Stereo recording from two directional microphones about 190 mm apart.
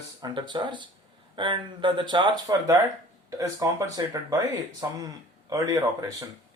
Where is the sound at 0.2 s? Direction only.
25° right (ahead or behind).